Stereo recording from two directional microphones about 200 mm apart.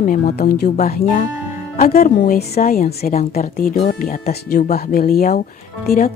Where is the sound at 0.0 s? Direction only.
45° left (ahead or behind).